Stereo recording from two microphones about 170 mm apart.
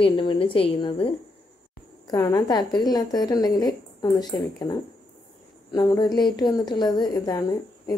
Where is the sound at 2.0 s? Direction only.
20° left (ahead or behind).